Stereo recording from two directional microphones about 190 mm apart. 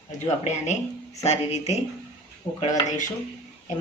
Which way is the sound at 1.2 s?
35° left (ahead or behind).